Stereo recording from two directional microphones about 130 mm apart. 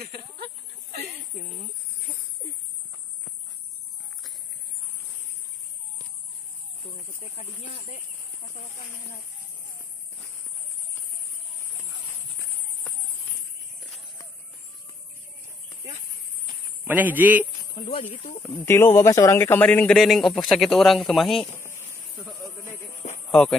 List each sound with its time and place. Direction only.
7.3 s speech: 60° left (ahead or behind)
13.7 s horse: centre (ahead or behind)
16.8 s a man's voice: 15° right (ahead or behind)
18.1 s speech: 65° left (ahead or behind)
18.6 s speech: 15° left (ahead or behind); by 21.5 s centre (ahead or behind)
21.5 s a sound: 20° left (ahead or behind)
22.9 s a sound: 65° left (ahead or behind)